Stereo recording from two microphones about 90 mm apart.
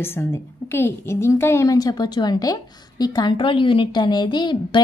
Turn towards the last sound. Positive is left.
turn(degrees=60)  # may be behind; listen again after turning